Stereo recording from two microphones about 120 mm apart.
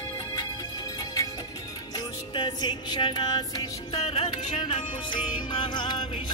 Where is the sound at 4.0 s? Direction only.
60° left (ahead or behind).